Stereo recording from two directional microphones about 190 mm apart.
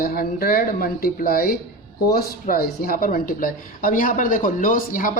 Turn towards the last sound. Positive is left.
turn(degrees=45)  # may be behind; listen again after turning